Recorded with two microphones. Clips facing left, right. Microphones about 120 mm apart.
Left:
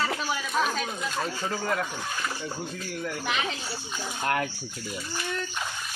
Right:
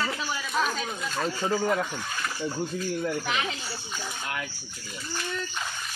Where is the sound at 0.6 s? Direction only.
5° left (ahead or behind).